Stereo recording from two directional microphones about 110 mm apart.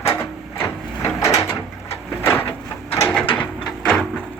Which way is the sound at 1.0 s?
25° left (ahead or behind).